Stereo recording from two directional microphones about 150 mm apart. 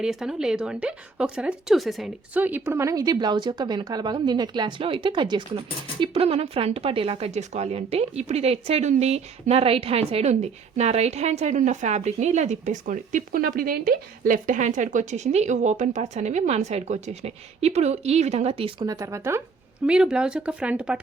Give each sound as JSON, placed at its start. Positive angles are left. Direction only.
{"t": 0.0, "sound": "a woman's voice", "side_deg": -5}
{"t": 18.9, "sound": "speech", "side_deg": -20}
{"t": 19.9, "sound": "speech", "side_deg": -5}